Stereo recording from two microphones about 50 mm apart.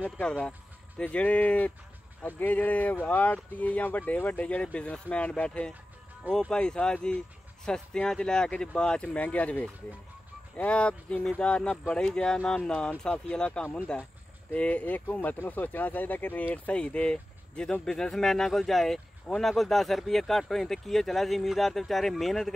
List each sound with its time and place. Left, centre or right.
0.2 s speech: centre
1.0 s speech: left
14.5 s speech: left; by 22.5 s centre